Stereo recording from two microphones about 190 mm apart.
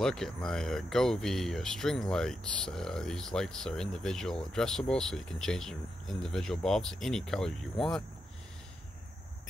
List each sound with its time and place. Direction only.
0.0 s speech: centre (ahead or behind)